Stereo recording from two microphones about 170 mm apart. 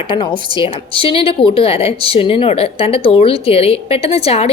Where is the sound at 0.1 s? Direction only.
30° left (ahead or behind).